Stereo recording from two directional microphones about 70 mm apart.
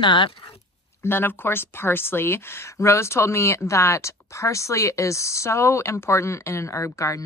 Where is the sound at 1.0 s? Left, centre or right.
Left.